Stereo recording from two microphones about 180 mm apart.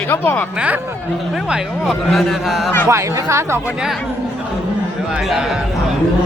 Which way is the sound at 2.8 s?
15° right (ahead or behind).